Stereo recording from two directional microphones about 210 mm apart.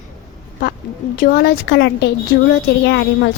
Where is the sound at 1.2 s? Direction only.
50° left (ahead or behind).